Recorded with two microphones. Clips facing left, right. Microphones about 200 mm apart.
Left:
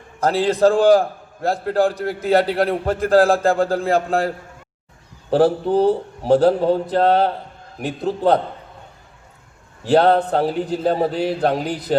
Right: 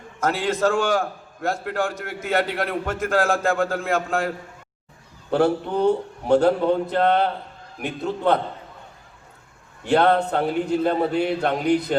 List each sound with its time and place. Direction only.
0.2 s a man's voice: 35° left (ahead or behind)
5.3 s a man's voice: 35° left (ahead or behind)
9.8 s a man's voice: 35° left (ahead or behind)